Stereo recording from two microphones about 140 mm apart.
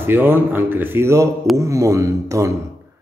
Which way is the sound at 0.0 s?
15° right (ahead or behind).